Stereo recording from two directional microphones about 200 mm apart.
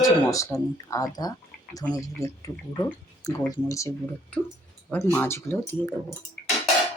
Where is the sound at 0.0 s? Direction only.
15° left (ahead or behind).